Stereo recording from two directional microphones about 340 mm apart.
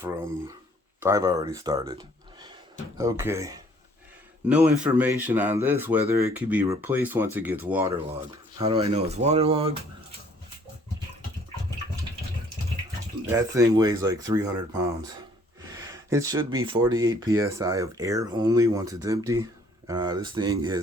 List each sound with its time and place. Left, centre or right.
0.0 s speech: centre
13.2 s speech: centre